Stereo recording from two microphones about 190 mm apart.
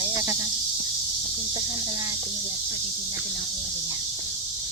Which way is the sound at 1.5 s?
15° right (ahead or behind).